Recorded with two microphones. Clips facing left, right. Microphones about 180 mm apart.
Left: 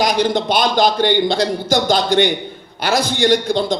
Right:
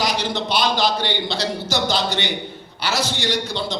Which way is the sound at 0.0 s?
50° left (ahead or behind).